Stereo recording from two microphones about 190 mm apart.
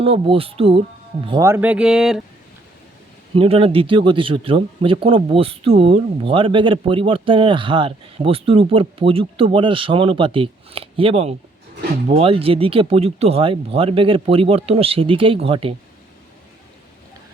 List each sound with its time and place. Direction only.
0.0 s speech: 30° right (ahead or behind)
1.3 s a sound: 15° right (ahead or behind)
3.3 s speech: 30° right (ahead or behind)